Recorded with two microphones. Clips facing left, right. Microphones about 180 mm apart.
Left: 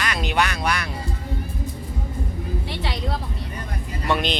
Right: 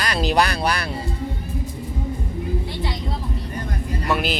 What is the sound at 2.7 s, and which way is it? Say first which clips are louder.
Vehicle: right 1 dB; 80° left.